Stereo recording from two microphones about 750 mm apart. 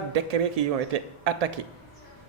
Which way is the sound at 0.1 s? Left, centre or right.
Right.